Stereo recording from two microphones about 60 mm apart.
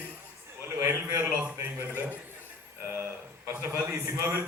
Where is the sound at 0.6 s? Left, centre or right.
Right.